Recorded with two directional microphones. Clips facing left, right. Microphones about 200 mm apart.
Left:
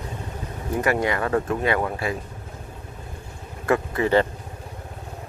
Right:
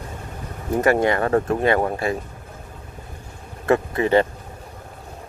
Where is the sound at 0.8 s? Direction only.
45° right (ahead or behind).